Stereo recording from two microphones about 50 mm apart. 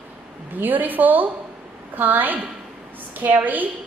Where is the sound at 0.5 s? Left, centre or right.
Right.